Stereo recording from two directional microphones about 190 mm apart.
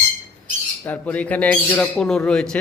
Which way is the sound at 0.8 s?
10° left (ahead or behind).